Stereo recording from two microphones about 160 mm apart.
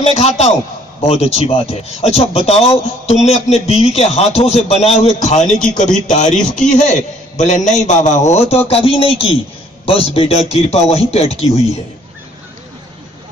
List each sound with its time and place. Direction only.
0.0 s a man's voice: 40° left (ahead or behind)